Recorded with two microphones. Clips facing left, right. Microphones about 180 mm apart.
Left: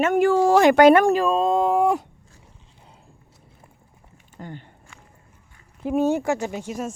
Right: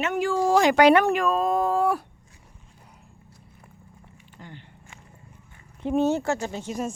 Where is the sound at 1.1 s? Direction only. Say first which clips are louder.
Left 3 dB; 25° left (ahead or behind).